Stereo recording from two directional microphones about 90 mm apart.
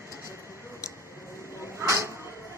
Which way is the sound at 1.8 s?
35° right (ahead or behind).